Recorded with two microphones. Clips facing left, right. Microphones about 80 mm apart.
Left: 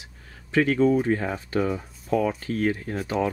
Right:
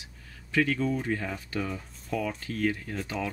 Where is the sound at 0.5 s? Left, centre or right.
Left.